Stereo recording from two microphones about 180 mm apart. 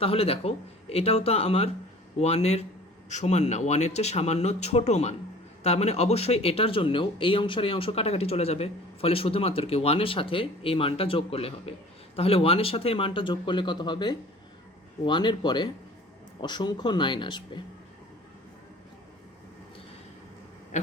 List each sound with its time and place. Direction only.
0.0 s speech: 30° left (ahead or behind)